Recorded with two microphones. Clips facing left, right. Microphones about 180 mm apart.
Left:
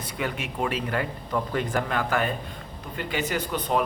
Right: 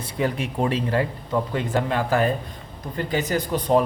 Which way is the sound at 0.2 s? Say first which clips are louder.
Right 5 dB; 35° right (ahead or behind).